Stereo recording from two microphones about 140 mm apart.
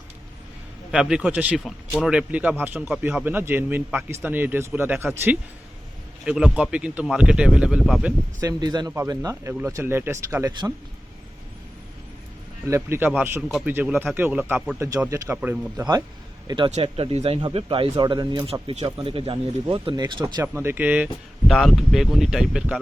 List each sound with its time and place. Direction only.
0.9 s speech: 5° right (ahead or behind)
1.6 s speech: 5° left (ahead or behind)
2.0 s speech: 10° right (ahead or behind)
6.2 s speech: 5° right (ahead or behind)
8.4 s speech: 25° right (ahead or behind)
12.6 s speech: 20° right (ahead or behind)
16.5 s speech: 30° right (ahead or behind)
16.7 s speech: 45° right (ahead or behind)
18.6 s speech: 50° right (ahead or behind)
20.6 s speech: 15° right (ahead or behind)
21.5 s speech: centre (ahead or behind)